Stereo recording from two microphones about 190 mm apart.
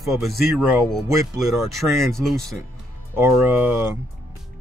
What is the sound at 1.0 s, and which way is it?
Speech, 15° right (ahead or behind).